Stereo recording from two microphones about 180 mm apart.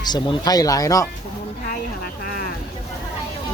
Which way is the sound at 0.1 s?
20° left (ahead or behind).